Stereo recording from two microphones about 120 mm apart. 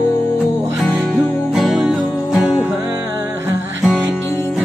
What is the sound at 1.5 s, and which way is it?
Music, centre (ahead or behind).